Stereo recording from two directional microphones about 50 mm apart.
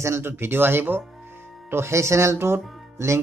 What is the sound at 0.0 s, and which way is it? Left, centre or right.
Speech, right.